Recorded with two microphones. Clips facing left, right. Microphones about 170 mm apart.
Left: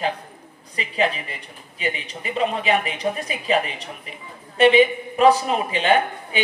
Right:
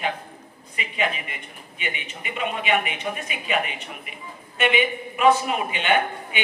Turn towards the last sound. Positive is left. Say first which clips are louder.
# left 3 dB
turn(degrees=35)  # may be behind; listen again after turning